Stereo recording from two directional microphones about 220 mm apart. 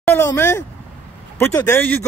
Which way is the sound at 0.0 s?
10° left (ahead or behind).